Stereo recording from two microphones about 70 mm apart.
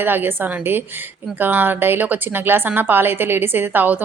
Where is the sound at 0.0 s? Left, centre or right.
Right.